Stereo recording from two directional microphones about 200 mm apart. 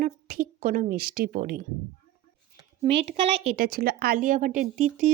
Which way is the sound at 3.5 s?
45° right (ahead or behind).